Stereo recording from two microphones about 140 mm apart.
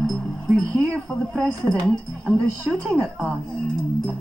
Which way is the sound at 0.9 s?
5° left (ahead or behind).